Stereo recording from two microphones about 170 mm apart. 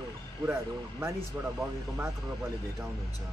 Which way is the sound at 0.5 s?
15° right (ahead or behind).